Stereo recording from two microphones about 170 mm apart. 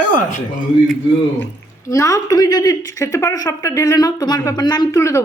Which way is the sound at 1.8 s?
20° left (ahead or behind).